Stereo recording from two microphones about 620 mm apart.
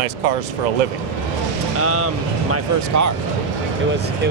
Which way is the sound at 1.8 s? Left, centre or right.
Right.